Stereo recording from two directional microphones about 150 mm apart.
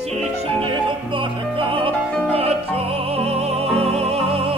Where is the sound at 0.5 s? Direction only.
35° right (ahead or behind).